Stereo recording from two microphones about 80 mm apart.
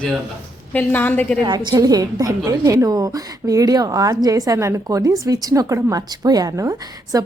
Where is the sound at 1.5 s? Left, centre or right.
Right.